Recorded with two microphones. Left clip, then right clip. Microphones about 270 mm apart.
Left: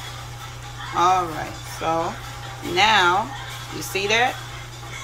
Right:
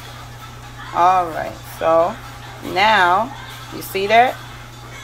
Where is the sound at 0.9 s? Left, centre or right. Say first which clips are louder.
Right 4 dB; centre.